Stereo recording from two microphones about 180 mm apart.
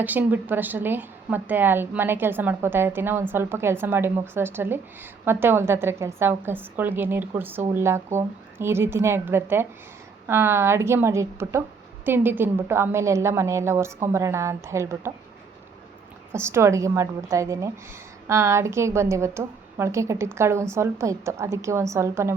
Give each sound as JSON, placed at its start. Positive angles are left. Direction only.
{"t": 0.0, "sound": "a woman's voice", "side_deg": -10}
{"t": 16.3, "sound": "a woman's voice", "side_deg": -15}